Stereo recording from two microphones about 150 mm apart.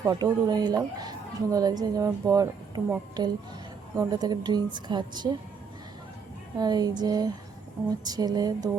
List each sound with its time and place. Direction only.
0.0 s a woman's voice: 25° right (ahead or behind)
6.6 s a woman's voice: 25° right (ahead or behind)